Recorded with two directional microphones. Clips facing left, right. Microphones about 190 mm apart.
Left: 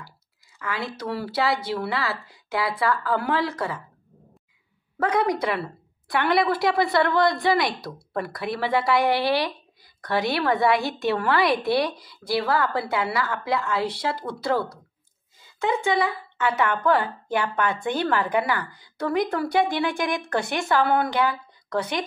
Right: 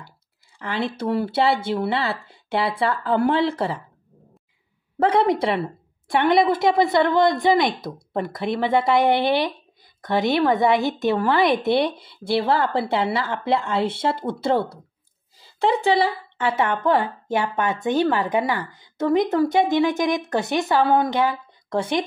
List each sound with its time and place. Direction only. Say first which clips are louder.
0.6 s a woman's voice: right 5 dB; 30° right (ahead or behind)
4.9 s a woman's voice: right 4 dB; 30° right (ahead or behind)